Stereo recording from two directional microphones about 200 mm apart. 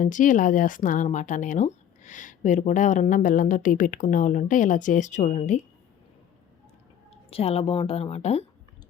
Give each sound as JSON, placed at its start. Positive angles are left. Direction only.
{"t": 0.0, "sound": "speech", "side_deg": 40}
{"t": 7.3, "sound": "a woman's voice", "side_deg": 30}